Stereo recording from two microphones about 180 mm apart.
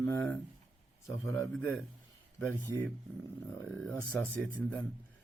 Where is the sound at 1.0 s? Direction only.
15° left (ahead or behind).